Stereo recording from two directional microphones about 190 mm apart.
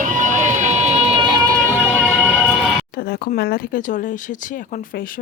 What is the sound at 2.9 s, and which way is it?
Speech, 55° left (ahead or behind).